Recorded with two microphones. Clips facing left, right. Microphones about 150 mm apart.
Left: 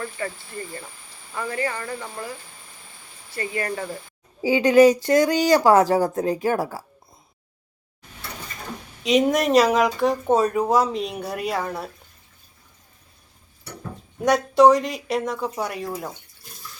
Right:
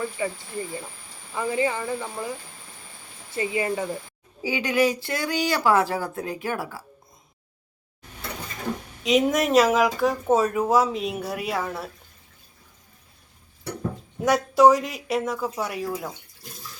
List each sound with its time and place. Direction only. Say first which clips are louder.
0.0 s speech: right 2 dB; 10° right (ahead or behind)
3.3 s speech: right 2 dB; 15° right (ahead or behind)
4.4 s speech: left 8 dB; 40° left (ahead or behind)
9.0 s speech: left 2 dB; centre (ahead or behind)
14.2 s speech: left 2 dB; 5° right (ahead or behind)